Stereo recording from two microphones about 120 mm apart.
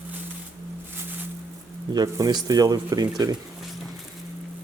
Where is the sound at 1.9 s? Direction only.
30° right (ahead or behind).